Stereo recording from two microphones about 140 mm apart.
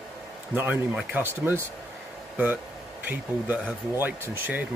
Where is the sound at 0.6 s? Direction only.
10° right (ahead or behind).